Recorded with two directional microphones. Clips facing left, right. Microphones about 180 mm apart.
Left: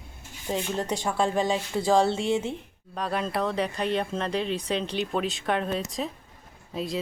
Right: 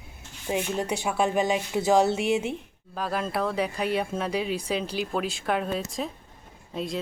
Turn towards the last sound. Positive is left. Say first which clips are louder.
# left 1 dB
turn(degrees=0)  # may be behind; listen again after turning